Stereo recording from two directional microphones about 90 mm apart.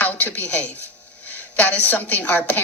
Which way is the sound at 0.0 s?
20° left (ahead or behind).